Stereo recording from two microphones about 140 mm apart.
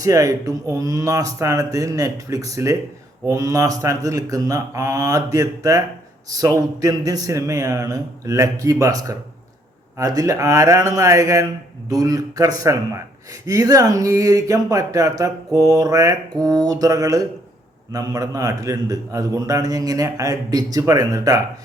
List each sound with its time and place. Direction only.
0.0 s speech: 25° right (ahead or behind)